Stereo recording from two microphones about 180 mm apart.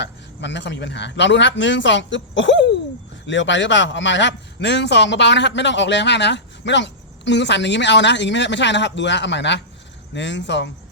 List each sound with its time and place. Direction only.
0.0 s a man's voice: 75° left (ahead or behind)